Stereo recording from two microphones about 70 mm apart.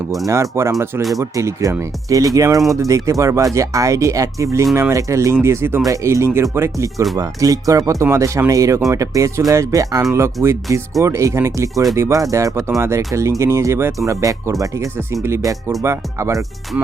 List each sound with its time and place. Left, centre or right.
0.3 s speech: right
5.8 s speech: right
7.2 s speech: right